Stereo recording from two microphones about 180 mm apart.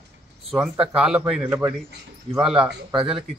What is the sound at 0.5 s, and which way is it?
Speech, 5° right (ahead or behind).